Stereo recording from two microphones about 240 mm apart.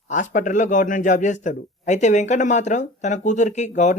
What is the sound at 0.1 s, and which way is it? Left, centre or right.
A man's voice, left.